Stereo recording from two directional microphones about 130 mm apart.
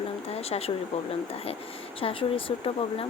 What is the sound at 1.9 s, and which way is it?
Speech, 45° left (ahead or behind).